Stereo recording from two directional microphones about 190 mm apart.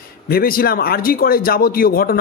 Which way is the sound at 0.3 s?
50° left (ahead or behind).